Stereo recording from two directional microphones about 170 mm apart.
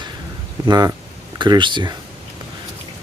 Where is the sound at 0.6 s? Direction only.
20° right (ahead or behind).